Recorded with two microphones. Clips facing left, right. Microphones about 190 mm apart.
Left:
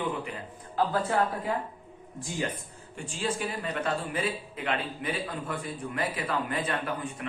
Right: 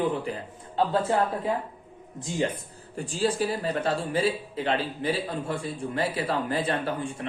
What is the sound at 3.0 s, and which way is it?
Speech, 35° right (ahead or behind).